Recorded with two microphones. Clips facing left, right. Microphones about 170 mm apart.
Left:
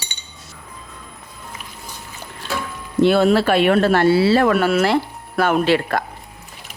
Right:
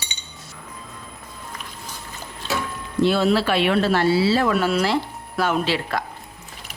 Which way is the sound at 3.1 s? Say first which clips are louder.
Left 4 dB; 55° left (ahead or behind).